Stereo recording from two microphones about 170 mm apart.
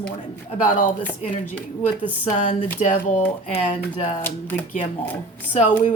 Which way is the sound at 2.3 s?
45° left (ahead or behind).